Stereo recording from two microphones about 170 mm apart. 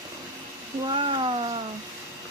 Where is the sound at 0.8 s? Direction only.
30° right (ahead or behind).